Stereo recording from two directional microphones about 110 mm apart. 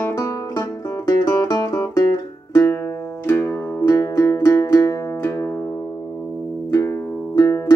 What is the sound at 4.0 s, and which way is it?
Music, 30° left (ahead or behind).